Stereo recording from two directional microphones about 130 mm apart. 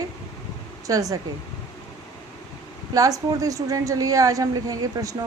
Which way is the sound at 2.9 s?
25° right (ahead or behind).